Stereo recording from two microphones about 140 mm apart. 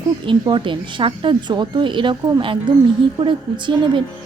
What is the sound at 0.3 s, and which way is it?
A woman's voice, 35° right (ahead or behind).